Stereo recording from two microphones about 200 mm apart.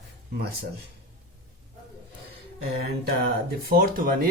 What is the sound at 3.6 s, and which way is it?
Speech, 50° right (ahead or behind).